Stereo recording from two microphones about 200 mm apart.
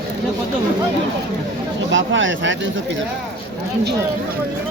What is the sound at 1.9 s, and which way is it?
Speech, 70° right (ahead or behind).